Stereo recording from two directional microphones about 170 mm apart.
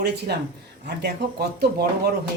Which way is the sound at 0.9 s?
80° right.